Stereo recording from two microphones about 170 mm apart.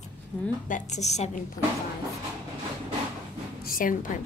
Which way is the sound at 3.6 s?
55° left (ahead or behind).